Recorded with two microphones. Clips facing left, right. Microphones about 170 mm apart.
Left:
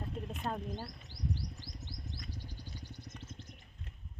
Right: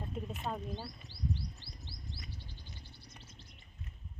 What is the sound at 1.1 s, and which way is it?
Chirp, 15° left (ahead or behind).